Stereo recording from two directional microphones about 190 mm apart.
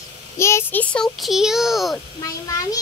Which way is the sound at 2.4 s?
20° left (ahead or behind).